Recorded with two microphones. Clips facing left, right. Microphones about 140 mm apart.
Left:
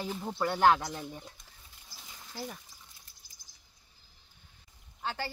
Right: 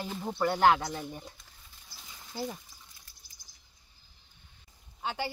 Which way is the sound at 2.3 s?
20° right (ahead or behind).